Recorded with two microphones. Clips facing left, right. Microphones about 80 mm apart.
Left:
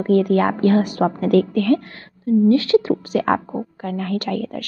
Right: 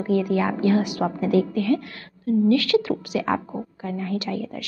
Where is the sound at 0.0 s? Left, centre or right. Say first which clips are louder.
Left 5 dB; left.